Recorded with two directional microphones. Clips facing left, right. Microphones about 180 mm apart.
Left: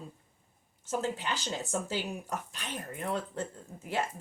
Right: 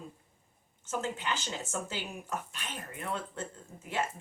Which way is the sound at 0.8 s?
35° left (ahead or behind).